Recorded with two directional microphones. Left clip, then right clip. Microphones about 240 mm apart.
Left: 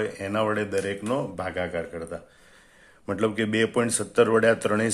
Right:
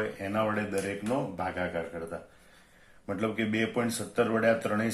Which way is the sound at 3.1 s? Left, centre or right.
Left.